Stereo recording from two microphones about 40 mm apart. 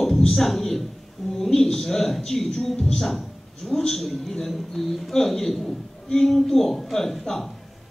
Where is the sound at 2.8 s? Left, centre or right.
Centre.